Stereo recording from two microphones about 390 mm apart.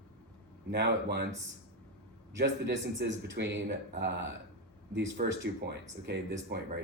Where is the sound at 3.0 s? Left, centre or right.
Right.